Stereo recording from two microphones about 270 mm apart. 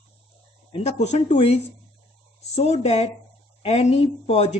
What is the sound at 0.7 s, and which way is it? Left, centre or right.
Speech, left.